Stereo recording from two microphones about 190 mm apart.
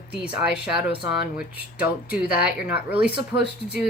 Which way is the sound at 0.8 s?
60° left (ahead or behind).